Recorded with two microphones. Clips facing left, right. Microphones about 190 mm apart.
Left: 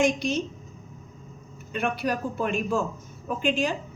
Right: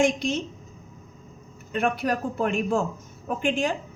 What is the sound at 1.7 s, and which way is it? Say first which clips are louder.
A woman's voice: right 2 dB; 50° right (ahead or behind).